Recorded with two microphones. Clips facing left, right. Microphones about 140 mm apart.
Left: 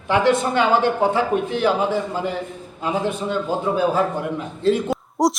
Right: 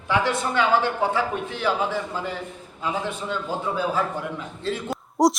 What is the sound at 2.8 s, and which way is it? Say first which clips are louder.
Speech: left 5 dB; 15° left (ahead or behind).